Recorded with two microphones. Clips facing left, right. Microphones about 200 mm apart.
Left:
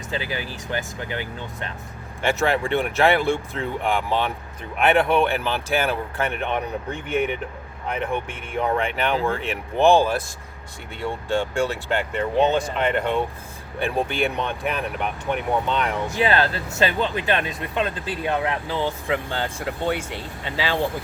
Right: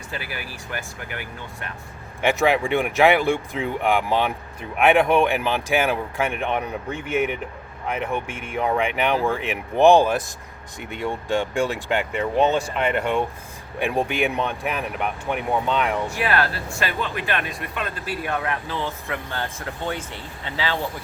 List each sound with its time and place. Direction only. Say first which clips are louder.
0.1 s speech: left 5 dB; 20° left (ahead or behind)
2.2 s speech: right 2 dB; 15° right (ahead or behind)
16.1 s speech: left 2 dB; 25° left (ahead or behind)